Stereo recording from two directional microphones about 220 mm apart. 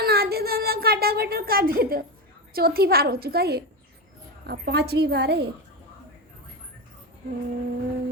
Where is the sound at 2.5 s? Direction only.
45° right (ahead or behind).